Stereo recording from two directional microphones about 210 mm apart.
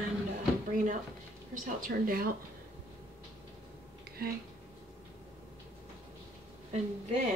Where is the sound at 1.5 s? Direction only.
40° right (ahead or behind).